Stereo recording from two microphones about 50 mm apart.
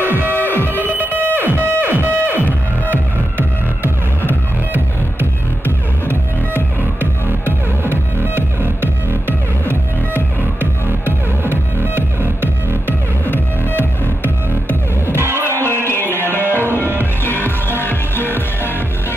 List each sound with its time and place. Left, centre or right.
0.1 s music: right
7.9 s music: right
10.6 s music: right
13.2 s music: left
15.1 s music: right
15.7 s music: left
16.2 s music: right
17.0 s music: left